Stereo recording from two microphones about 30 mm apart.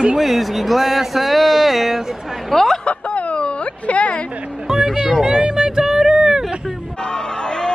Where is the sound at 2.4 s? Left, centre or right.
Centre.